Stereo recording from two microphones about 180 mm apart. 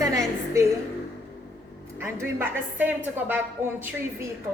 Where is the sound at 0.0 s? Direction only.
20° right (ahead or behind).